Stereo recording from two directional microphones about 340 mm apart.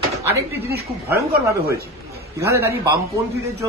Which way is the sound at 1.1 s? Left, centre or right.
Centre.